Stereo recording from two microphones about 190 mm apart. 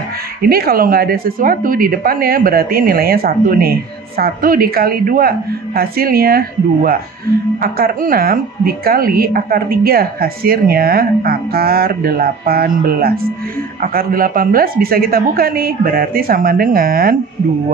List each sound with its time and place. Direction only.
0.4 s speech: 55° right (ahead or behind)